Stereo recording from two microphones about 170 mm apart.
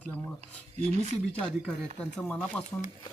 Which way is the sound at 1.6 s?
5° left (ahead or behind).